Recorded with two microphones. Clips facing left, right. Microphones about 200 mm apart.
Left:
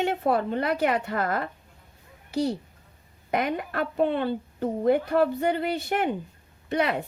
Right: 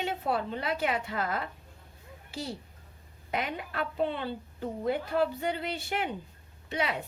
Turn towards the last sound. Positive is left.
turn(degrees=50)  # may be behind; listen again after turning